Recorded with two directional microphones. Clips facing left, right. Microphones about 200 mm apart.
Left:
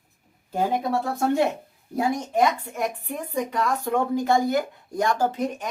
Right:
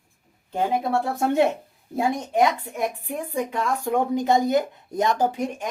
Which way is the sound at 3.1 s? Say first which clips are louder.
Even; 10° right (ahead or behind).